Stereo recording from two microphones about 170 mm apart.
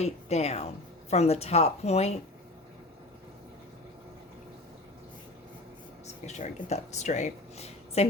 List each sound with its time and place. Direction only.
0.0 s speech: 40° left (ahead or behind)
6.2 s speech: 40° left (ahead or behind)